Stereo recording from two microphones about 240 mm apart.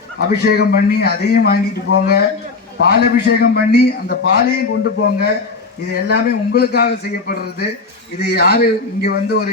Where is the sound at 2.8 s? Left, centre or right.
Left.